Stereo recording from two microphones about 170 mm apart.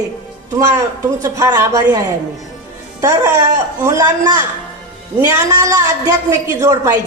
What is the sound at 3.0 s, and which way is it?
A woman's voice, 20° right (ahead or behind).